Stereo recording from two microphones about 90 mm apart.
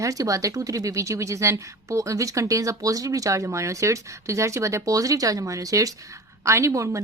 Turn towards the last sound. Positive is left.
turn(degrees=-35)  # may be behind; listen again after turning